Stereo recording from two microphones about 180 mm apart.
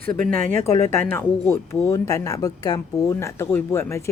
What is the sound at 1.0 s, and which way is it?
Speech, 10° left (ahead or behind).